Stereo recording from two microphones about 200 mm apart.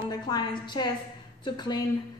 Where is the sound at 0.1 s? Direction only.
20° left (ahead or behind).